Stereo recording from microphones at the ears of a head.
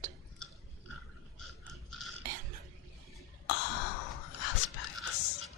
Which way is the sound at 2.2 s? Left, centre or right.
Right.